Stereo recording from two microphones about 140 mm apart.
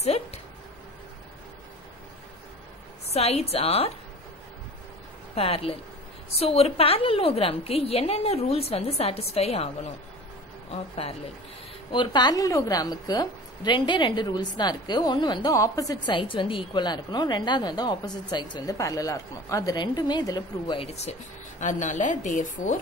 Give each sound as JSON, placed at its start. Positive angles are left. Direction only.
{"t": 0.0, "sound": "a sound", "side_deg": 50}
{"t": 3.1, "sound": "a woman's voice", "side_deg": 50}
{"t": 5.3, "sound": "a woman's voice", "side_deg": 45}
{"t": 10.7, "sound": "a woman's voice", "side_deg": 45}
{"t": 11.9, "sound": "a woman's voice", "side_deg": 35}
{"t": 15.5, "sound": "a woman's voice", "side_deg": 25}
{"t": 20.8, "sound": "a woman's voice", "side_deg": 50}
{"t": 21.5, "sound": "a woman's voice", "side_deg": 60}